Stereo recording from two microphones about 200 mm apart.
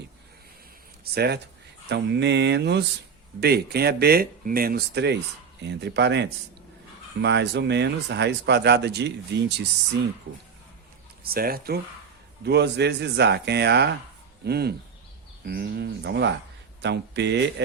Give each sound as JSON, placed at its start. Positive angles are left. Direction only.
{"t": 1.1, "sound": "speech", "side_deg": -55}
{"t": 11.2, "sound": "speech", "side_deg": -50}